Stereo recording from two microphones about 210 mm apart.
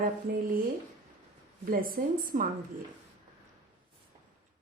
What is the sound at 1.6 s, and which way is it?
Speech, 40° right (ahead or behind).